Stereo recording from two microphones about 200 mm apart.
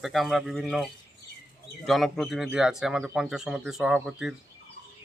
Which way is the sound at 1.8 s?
Centre (ahead or behind).